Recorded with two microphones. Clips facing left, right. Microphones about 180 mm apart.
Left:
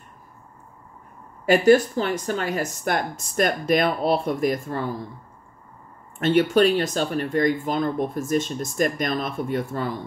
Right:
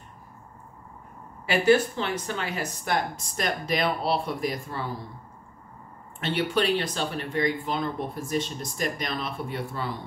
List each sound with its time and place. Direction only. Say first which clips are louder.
1.4 s speech: left 5 dB; 45° left (ahead or behind)
6.1 s speech: left 8 dB; 45° left (ahead or behind)